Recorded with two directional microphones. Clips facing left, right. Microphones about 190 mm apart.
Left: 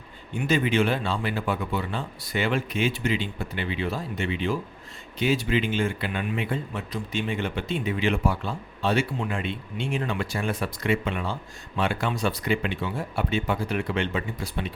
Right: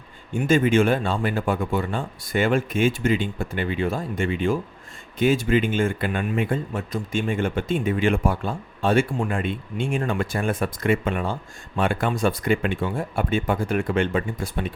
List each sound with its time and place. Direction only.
0.3 s speech: 45° right (ahead or behind)